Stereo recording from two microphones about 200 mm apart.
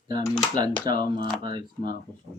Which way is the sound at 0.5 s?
20° right (ahead or behind).